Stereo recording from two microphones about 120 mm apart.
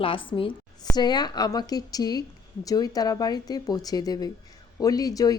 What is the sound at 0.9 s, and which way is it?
Speech, 35° left (ahead or behind).